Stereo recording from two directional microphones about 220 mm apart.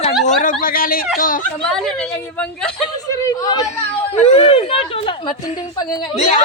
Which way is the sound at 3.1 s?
15° left (ahead or behind).